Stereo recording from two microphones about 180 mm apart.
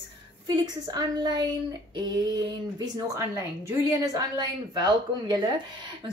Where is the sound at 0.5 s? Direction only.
25° right (ahead or behind).